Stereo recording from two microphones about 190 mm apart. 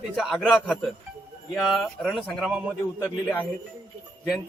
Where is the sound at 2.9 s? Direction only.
10° left (ahead or behind).